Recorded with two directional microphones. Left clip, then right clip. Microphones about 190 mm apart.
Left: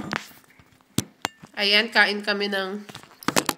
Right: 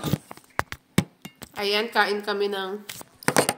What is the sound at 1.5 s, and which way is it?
Speech, 15° left (ahead or behind).